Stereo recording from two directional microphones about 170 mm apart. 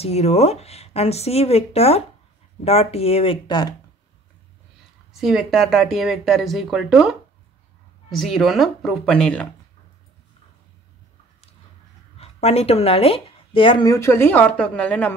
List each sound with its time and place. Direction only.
0.0 s speech: 40° left (ahead or behind)
5.2 s speech: centre (ahead or behind)
12.2 s speech: 40° left (ahead or behind); by 15.1 s 10° left (ahead or behind)